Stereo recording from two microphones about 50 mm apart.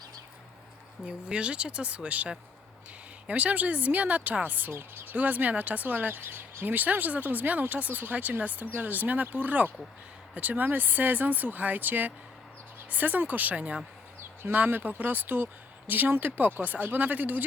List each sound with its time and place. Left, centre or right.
1.0 s speech: right
4.7 s speech: right
14.4 s speech: right